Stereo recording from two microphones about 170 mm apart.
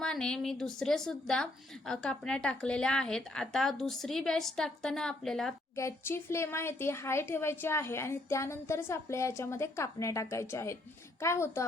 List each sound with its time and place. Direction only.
0.0 s a woman's voice: 5° left (ahead or behind)
5.7 s speech: 15° left (ahead or behind)